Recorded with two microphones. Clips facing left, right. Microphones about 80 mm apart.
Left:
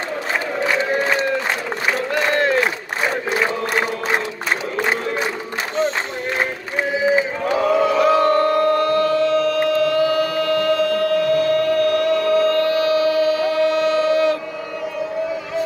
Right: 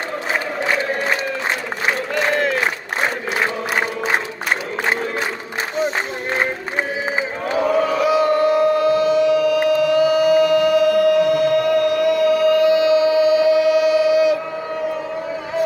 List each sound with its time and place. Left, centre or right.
2.1 s crowd: centre
7.9 s music: centre